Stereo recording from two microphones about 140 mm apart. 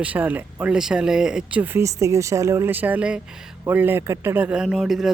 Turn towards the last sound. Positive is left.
turn(degrees=0)  # may be behind; listen again after turning